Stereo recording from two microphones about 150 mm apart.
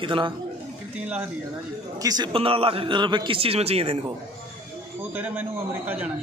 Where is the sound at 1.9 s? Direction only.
25° right (ahead or behind); by 4.0 s 40° right (ahead or behind).